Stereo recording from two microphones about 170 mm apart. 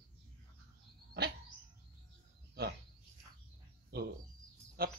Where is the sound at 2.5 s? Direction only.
70° right (ahead or behind).